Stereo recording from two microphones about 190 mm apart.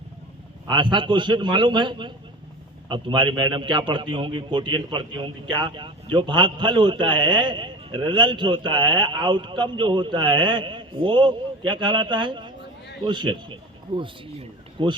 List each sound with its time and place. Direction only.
0.7 s a man's voice: 25° right (ahead or behind)